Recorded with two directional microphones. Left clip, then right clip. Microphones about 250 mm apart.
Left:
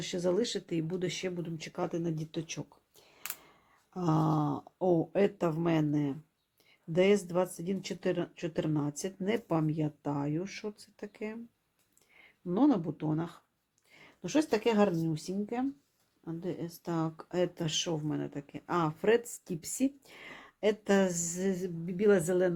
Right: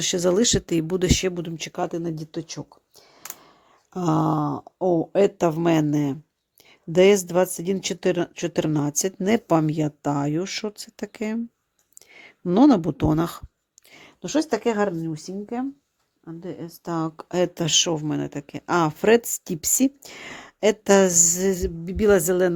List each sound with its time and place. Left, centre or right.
0.0 s speech: right
3.9 s speech: right